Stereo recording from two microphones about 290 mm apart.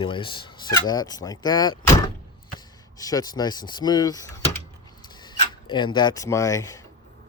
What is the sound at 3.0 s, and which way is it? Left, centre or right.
Speech, centre.